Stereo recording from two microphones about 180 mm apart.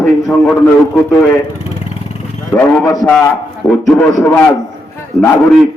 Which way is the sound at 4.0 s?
10° left (ahead or behind).